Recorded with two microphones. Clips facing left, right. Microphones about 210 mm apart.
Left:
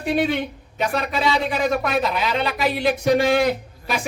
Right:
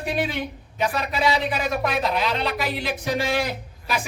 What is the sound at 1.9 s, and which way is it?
Speech, centre (ahead or behind).